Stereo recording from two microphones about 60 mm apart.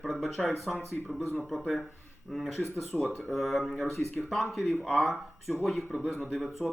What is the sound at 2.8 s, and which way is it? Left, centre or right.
Speech, left.